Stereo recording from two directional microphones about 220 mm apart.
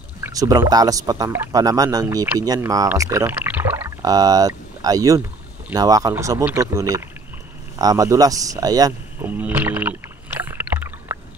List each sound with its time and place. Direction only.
0.2 s speech: 15° right (ahead or behind)
10.4 s rowboat: 10° right (ahead or behind)